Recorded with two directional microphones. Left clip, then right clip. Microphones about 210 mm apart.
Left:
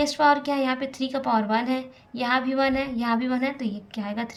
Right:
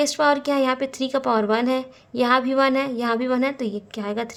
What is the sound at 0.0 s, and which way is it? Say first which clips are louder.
A woman's voice: right 1 dB; 55° right (ahead or behind).